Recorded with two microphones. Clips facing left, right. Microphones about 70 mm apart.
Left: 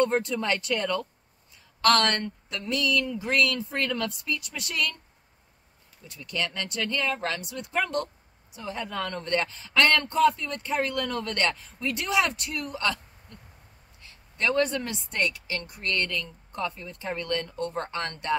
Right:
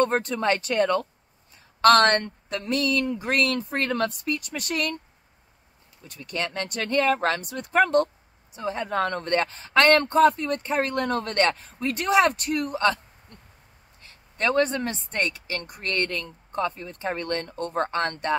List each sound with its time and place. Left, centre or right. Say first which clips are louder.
0.0 s speech: right 2 dB; right
6.0 s speech: right 2 dB; right